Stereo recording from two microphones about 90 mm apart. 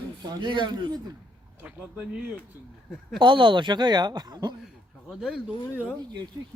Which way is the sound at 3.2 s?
65° right (ahead or behind).